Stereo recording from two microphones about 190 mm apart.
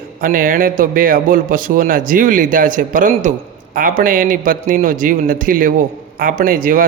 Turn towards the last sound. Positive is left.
turn(degrees=-45)  # may be behind; listen again after turning